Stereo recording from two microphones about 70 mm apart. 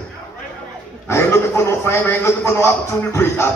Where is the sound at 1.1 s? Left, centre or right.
Left.